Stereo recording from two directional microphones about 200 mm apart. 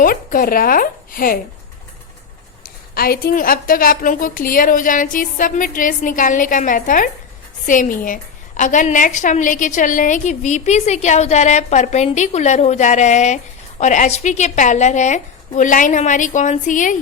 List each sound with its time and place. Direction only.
0.0 s a woman's voice: 45° left (ahead or behind)
2.6 s a woman's voice: 50° left (ahead or behind)